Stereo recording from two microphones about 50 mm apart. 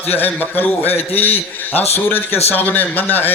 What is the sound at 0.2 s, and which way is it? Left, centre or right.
A man's voice, left.